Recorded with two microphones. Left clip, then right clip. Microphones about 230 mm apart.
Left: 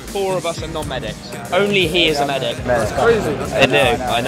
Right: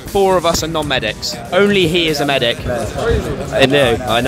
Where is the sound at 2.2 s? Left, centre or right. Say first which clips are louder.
Right 4 dB; right.